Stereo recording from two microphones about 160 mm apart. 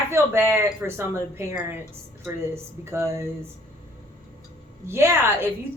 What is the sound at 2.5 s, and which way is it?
Speech, 15° right (ahead or behind).